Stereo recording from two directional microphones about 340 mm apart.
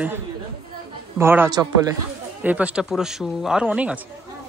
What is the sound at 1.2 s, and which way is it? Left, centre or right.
A woman's voice, centre.